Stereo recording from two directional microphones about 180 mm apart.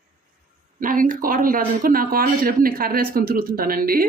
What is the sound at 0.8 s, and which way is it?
Speech, 50° right (ahead or behind).